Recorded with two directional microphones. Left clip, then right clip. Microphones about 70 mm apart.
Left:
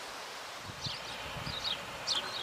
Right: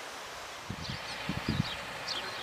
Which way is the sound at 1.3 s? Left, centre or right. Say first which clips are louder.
Right 3 dB; centre.